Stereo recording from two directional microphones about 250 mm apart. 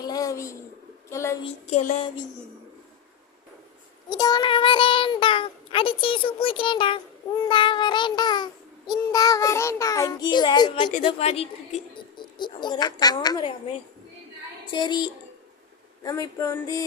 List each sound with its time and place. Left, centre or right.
0.0 s a sound: centre
1.1 s child singing: centre
1.5 s a child's voice: left
4.1 s a child's voice: centre
7.4 s child singing: centre
10.9 s a child's voice: left
14.7 s child singing: centre